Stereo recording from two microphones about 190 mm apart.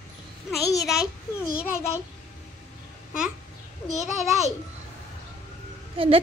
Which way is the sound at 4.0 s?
Centre (ahead or behind).